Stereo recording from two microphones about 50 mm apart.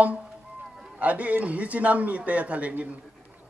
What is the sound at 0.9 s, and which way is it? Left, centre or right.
A man's voice, right.